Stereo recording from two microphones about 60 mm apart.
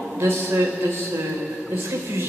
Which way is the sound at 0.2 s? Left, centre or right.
Right.